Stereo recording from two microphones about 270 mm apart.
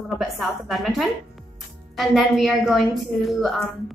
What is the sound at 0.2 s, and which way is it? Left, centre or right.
A woman's voice, centre.